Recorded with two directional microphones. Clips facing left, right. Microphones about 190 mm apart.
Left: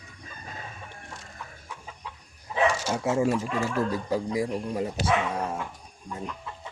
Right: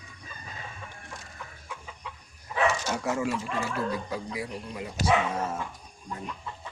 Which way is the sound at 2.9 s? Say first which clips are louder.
Left 4 dB; 25° left (ahead or behind).